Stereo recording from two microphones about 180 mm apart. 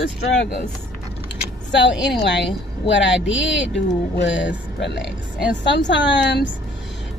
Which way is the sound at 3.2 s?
90° left.